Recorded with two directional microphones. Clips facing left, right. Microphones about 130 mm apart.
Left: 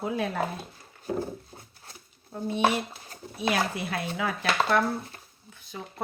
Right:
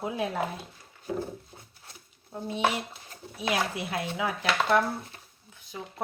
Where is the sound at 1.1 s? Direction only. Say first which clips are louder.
Left 2 dB; 40° left (ahead or behind).